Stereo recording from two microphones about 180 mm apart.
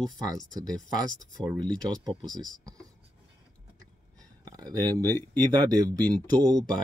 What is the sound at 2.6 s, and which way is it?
Writing, 20° right (ahead or behind).